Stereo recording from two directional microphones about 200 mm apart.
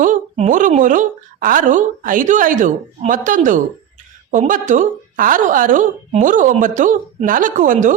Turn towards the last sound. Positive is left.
turn(degrees=-40)  # may be behind; listen again after turning